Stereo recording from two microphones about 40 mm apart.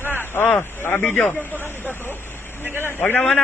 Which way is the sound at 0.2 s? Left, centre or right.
Left.